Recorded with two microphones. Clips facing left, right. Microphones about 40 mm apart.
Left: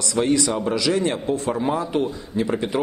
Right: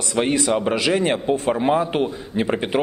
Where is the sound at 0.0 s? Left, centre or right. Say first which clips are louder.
Even; right.